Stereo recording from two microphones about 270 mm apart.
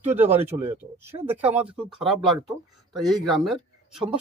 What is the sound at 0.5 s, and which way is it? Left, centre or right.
Speech, right.